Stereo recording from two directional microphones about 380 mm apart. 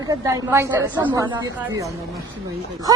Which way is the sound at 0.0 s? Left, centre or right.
Centre.